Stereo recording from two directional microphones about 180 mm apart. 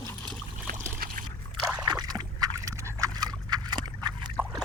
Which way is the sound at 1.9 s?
25° right (ahead or behind).